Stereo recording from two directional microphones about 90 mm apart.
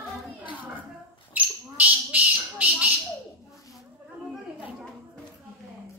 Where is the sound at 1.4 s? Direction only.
15° right (ahead or behind).